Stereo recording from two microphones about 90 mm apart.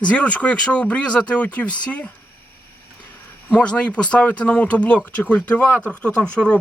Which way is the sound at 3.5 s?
15° left (ahead or behind).